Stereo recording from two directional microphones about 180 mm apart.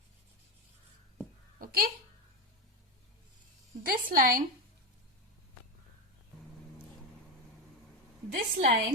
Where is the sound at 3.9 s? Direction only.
50° right (ahead or behind).